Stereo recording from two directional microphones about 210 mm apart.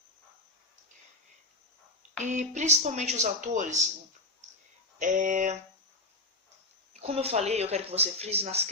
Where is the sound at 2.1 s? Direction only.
35° right (ahead or behind).